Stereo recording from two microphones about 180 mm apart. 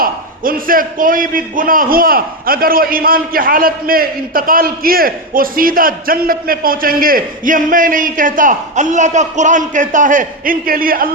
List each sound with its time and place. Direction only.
0.0 s a man's voice: 50° right (ahead or behind)